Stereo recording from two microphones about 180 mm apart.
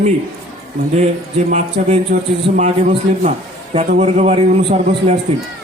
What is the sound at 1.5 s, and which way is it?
Speech, 40° right (ahead or behind).